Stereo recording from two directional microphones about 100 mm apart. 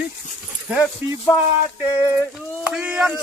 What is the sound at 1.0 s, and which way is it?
Speech, 20° right (ahead or behind).